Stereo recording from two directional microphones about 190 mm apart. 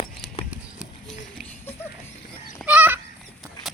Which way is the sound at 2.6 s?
10° right (ahead or behind).